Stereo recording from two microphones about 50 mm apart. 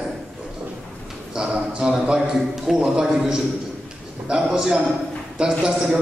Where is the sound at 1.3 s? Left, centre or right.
Centre.